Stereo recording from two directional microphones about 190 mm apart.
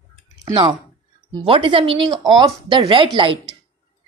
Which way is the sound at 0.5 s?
25° right (ahead or behind).